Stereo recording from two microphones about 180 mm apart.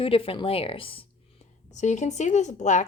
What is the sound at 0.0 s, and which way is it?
A woman's voice, 30° left (ahead or behind).